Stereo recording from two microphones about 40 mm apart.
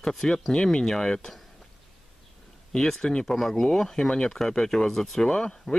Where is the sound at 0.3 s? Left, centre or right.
Centre.